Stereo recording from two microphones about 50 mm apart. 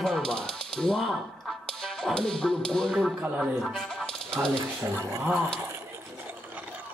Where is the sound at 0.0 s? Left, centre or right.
Centre.